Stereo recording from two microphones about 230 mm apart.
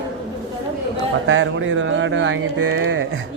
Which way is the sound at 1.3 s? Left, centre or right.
Right.